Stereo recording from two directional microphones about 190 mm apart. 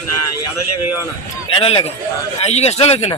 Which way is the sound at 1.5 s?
30° left (ahead or behind).